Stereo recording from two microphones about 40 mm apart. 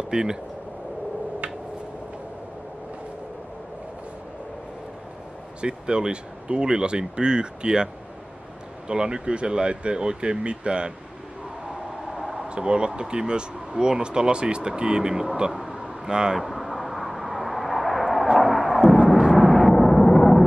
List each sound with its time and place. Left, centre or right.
0.1 s speech: centre
5.6 s speech: right
11.7 s train: centre
12.4 s speech: right
15.5 s a sound: centre
16.3 s vehicle: centre
18.2 s a sound: centre
19.5 s vehicle: centre